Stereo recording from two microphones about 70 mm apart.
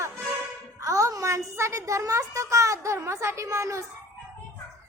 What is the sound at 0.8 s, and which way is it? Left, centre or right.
Music, right.